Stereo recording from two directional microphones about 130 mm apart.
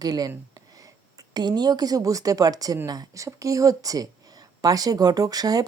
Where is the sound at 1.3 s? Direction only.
30° right (ahead or behind).